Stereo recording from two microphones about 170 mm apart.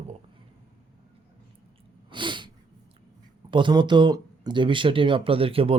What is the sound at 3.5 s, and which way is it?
Speech, 30° right (ahead or behind).